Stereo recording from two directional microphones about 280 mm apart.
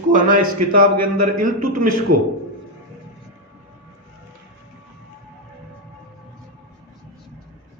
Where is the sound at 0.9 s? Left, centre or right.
Right.